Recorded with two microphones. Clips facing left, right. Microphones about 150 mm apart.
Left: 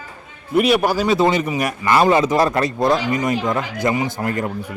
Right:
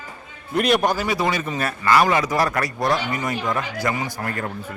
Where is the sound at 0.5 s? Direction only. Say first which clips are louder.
Left 3 dB; 5° left (ahead or behind).